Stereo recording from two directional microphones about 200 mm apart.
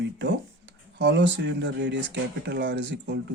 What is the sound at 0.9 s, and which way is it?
Speech, 60° right (ahead or behind).